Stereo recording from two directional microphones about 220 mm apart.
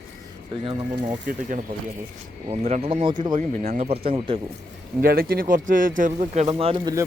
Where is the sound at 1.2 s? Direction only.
35° right (ahead or behind).